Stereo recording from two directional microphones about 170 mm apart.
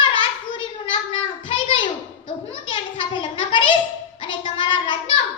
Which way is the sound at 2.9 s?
30° left (ahead or behind).